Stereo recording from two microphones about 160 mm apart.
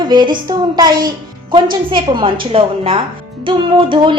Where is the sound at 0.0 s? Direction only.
30° right (ahead or behind).